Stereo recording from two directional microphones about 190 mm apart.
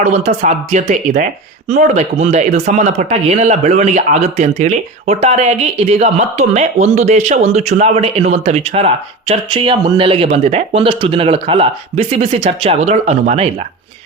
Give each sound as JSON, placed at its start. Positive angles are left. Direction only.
{"t": 0.0, "sound": "speech", "side_deg": -35}